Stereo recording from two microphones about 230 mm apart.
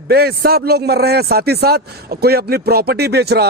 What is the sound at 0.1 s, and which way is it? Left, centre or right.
A man's voice, right.